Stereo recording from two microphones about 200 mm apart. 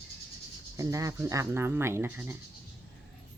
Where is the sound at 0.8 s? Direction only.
15° right (ahead or behind).